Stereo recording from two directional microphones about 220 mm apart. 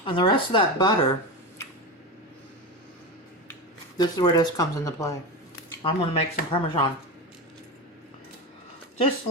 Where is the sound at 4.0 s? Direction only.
20° left (ahead or behind).